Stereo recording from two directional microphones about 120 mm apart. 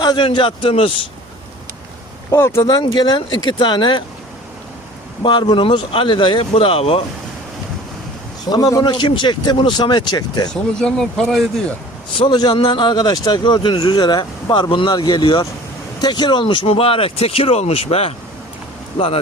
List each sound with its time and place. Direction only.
0.0 s speech: 40° left (ahead or behind)
2.3 s speech: 20° left (ahead or behind); by 4.0 s 40° left (ahead or behind)
5.2 s speech: 40° left (ahead or behind)
8.4 s speech: 30° left (ahead or behind)
10.5 s speech: 5° left (ahead or behind)
12.1 s speech: 40° left (ahead or behind)